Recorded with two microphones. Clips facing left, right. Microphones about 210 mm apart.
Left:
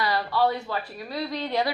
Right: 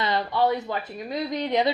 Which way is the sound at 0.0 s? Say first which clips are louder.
Right 1 dB; 20° right (ahead or behind).